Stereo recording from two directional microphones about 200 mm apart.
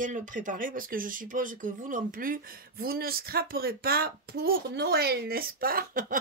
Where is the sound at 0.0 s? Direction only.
40° right (ahead or behind).